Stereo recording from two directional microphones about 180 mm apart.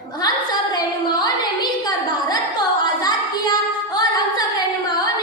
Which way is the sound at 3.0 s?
20° left (ahead or behind).